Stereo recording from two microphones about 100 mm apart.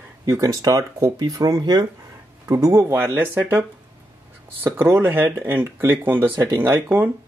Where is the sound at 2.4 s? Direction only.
30° right (ahead or behind).